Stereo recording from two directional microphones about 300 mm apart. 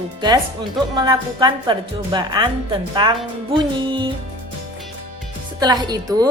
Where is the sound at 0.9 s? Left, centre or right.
Centre.